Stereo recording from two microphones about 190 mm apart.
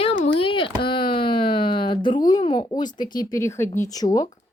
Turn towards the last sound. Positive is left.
turn(degrees=20)  # may be behind; listen again after turning